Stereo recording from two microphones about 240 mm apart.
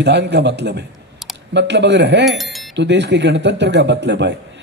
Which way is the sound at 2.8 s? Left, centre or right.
Right.